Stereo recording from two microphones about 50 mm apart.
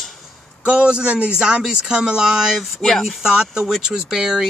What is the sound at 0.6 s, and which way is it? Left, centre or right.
Speech, right.